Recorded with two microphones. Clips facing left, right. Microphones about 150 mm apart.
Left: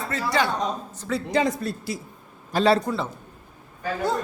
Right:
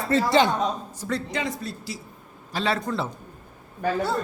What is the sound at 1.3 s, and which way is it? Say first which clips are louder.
A man's voice: left 6 dB; 40° left (ahead or behind).